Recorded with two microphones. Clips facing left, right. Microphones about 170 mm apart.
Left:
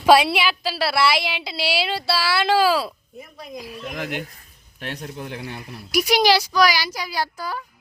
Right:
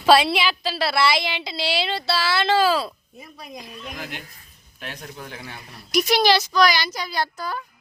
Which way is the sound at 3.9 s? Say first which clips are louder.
Left 8 dB; 60° left (ahead or behind).